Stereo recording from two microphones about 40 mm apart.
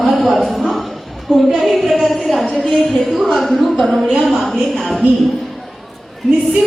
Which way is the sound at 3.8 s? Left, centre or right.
Centre.